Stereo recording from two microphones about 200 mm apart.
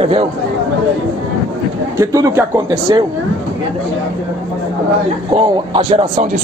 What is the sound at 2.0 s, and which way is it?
Speech, 15° right (ahead or behind).